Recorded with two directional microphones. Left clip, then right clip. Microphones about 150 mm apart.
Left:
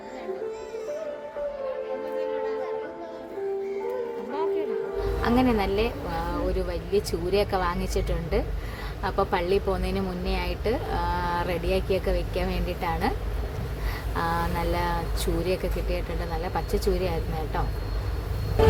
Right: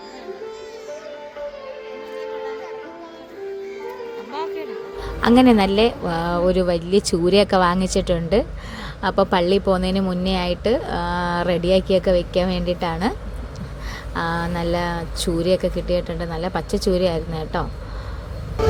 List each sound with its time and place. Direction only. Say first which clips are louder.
4.3 s music: even; 15° left (ahead or behind)
5.2 s speech: right 10 dB; 40° right (ahead or behind)
14.2 s speech: right 3 dB; 25° right (ahead or behind)